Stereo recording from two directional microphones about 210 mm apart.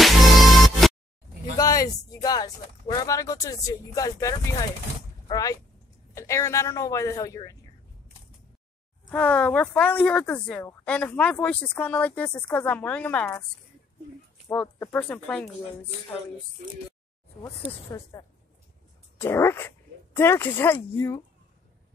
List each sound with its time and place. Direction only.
0.0 s music: centre (ahead or behind)
1.6 s speech: 15° left (ahead or behind)
9.1 s speech: 5° left (ahead or behind)
14.5 s speech: 10° left (ahead or behind)
18.1 s speech: 15° left (ahead or behind)